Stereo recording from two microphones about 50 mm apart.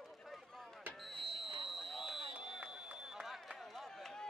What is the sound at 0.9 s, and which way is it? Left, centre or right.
Smoke detector, centre.